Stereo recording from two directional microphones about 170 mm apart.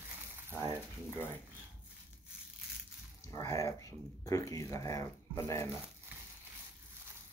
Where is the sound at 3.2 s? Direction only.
20° left (ahead or behind).